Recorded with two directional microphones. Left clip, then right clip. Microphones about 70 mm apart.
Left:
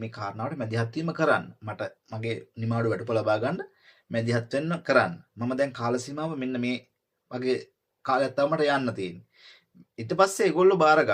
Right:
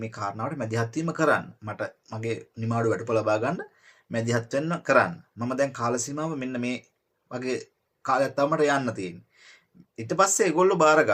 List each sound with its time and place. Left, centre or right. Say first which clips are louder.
0.0 s speech: right 2 dB; right